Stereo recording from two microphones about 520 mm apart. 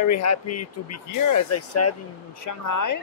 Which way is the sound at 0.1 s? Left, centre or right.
Left.